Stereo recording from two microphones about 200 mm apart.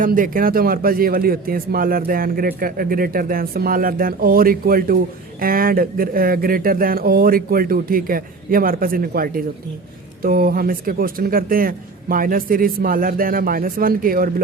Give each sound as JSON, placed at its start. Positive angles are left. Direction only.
{"t": 0.0, "sound": "speech", "side_deg": -45}